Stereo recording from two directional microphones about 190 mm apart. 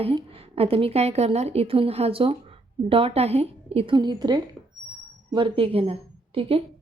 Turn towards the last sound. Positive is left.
turn(degrees=-30)  # may be behind; listen again after turning